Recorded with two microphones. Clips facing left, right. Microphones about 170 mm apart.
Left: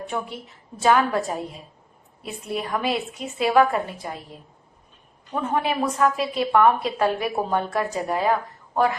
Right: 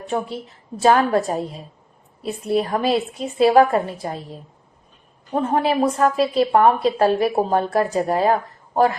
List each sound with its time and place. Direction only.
0.1 s a woman's voice: 35° right (ahead or behind)